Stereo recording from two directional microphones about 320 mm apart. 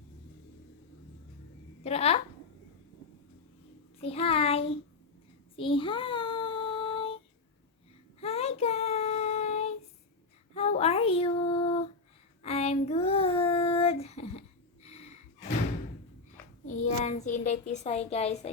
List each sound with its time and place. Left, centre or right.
1.8 s a woman's voice: centre
4.0 s a child's voice: centre
5.5 s child singing: centre
8.2 s child singing: centre
14.8 s gasp: centre
16.6 s a woman's voice: left